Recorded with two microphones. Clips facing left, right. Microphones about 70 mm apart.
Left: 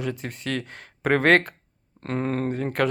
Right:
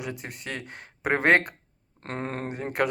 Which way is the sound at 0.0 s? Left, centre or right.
Centre.